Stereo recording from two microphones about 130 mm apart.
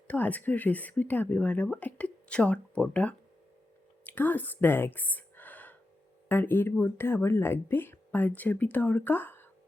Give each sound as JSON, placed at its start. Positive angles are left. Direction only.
{"t": 0.1, "sound": "speech", "side_deg": 15}